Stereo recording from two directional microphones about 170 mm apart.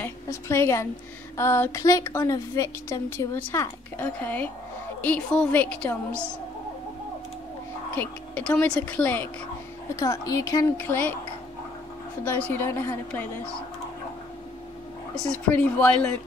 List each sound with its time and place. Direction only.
0.0 s a woman's voice: 15° left (ahead or behind)
7.9 s a woman's voice: 10° left (ahead or behind)
12.3 s a woman's voice: 15° left (ahead or behind)
15.5 s a woman's voice: 10° left (ahead or behind)